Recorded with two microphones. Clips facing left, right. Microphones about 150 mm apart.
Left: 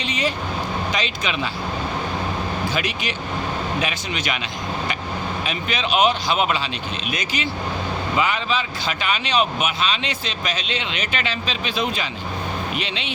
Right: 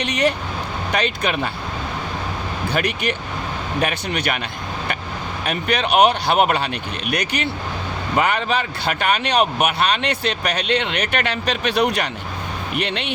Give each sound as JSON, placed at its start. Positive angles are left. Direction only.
{"t": 0.0, "sound": "speech", "side_deg": -65}
{"t": 2.7, "sound": "speech", "side_deg": -60}
{"t": 5.5, "sound": "speech", "side_deg": -60}